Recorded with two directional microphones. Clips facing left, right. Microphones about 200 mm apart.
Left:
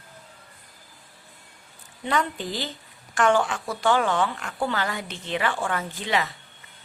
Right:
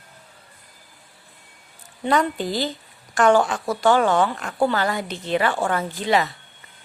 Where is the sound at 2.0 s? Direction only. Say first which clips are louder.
Right 5 dB; 40° right (ahead or behind).